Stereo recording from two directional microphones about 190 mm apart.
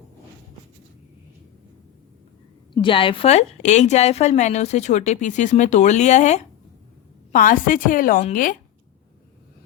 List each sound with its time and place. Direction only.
2.7 s a woman's voice: 25° left (ahead or behind); by 8.5 s 45° left (ahead or behind)